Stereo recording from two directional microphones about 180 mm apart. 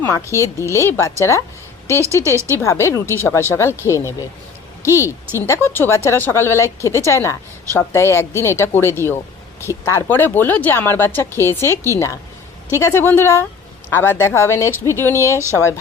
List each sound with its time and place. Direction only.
0.0 s speech: 15° left (ahead or behind)
2.3 s speech: 15° right (ahead or behind)
2.6 s a woman's voice: 15° left (ahead or behind)